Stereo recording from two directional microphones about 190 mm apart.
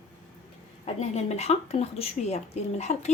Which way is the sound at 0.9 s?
35° left (ahead or behind).